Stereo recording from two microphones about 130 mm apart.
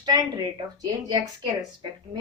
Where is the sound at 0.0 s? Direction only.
35° right (ahead or behind).